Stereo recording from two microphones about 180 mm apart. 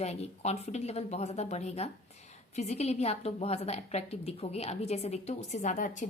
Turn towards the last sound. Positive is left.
turn(degrees=45)  # may be behind; listen again after turning